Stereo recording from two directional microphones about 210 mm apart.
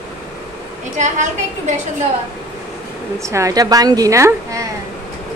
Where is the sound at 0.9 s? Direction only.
35° right (ahead or behind).